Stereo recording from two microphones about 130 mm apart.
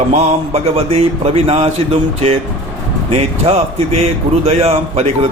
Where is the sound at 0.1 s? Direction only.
50° right (ahead or behind).